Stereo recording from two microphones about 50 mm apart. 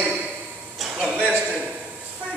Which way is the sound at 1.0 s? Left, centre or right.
Right.